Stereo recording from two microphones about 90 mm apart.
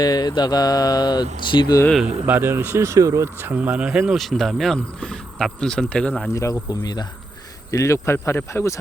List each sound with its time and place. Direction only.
0.0 s mantra: 50° left (ahead or behind)
2.2 s speech: 20° right (ahead or behind)
3.5 s speech: 15° right (ahead or behind)
4.2 s speech: centre (ahead or behind)
6.3 s mantra: 40° left (ahead or behind)
7.7 s speech: 35° left (ahead or behind)